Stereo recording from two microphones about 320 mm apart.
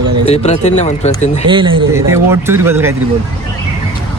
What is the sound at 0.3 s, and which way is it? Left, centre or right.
Speech, left.